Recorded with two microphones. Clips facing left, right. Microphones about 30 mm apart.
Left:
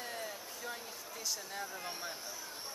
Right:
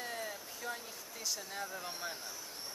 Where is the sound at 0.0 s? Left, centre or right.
Centre.